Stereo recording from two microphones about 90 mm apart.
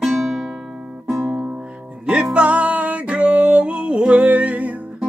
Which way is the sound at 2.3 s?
15° right (ahead or behind).